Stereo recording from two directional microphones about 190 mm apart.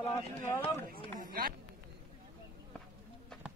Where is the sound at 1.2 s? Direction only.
50° right (ahead or behind).